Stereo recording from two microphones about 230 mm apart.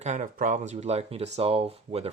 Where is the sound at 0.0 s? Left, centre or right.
Right.